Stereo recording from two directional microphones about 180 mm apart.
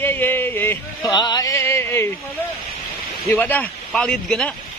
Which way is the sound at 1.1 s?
20° left (ahead or behind).